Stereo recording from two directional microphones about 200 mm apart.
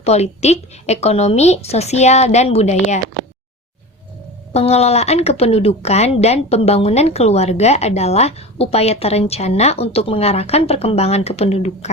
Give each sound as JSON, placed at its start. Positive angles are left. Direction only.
{"t": 0.0, "sound": "a woman's voice", "side_deg": 35}
{"t": 4.5, "sound": "a woman's voice", "side_deg": 30}